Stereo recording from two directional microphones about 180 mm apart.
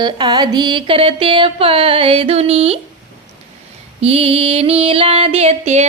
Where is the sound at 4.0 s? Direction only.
35° right (ahead or behind).